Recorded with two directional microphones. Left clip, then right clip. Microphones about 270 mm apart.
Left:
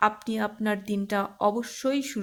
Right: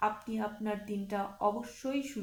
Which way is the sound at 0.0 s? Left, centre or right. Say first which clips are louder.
Left 8 dB; left.